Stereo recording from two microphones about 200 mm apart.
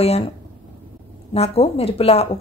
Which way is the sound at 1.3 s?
30° left (ahead or behind).